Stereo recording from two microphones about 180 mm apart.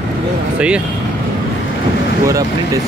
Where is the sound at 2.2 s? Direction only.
20° right (ahead or behind).